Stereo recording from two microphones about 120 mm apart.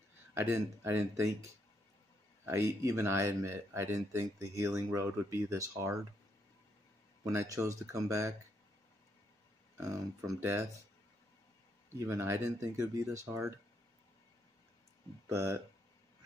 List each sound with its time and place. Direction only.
0.3 s speech: 20° right (ahead or behind)
2.4 s speech: 25° right (ahead or behind)
7.2 s speech: 30° right (ahead or behind)
9.8 s speech: 25° right (ahead or behind)
11.9 s speech: 25° right (ahead or behind)
15.2 s speech: 25° right (ahead or behind)